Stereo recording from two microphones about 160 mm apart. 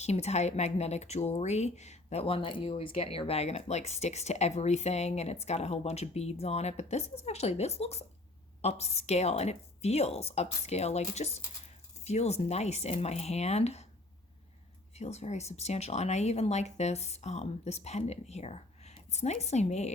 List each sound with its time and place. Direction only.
0.0 s speech: 45° left (ahead or behind)
14.9 s speech: 45° left (ahead or behind)